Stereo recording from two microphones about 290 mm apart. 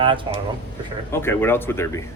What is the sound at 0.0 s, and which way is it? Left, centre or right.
Speech, centre.